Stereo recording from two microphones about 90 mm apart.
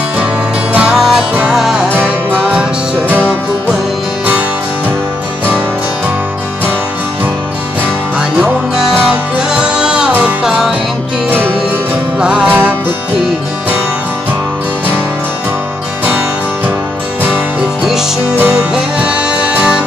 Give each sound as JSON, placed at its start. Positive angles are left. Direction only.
{"t": 0.7, "sound": "music", "side_deg": -5}
{"t": 2.0, "sound": "music", "side_deg": -15}
{"t": 4.3, "sound": "music", "side_deg": -20}
{"t": 8.2, "sound": "music", "side_deg": -5}
{"t": 12.2, "sound": "music", "side_deg": -10}
{"t": 16.1, "sound": "music", "side_deg": -20}
{"t": 18.3, "sound": "music", "side_deg": -25}
{"t": 18.7, "sound": "music", "side_deg": -10}